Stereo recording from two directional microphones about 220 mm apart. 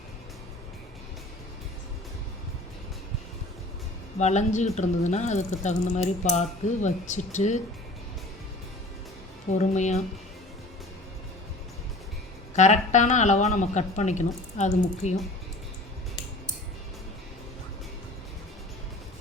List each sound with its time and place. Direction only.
4.2 s speech: 30° left (ahead or behind)
9.5 s speech: 35° left (ahead or behind)
12.5 s speech: 30° left (ahead or behind)